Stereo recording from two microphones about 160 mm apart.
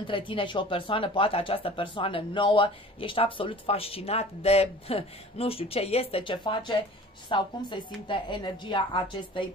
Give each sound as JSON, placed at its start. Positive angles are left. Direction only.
{"t": 0.0, "sound": "speech", "side_deg": 30}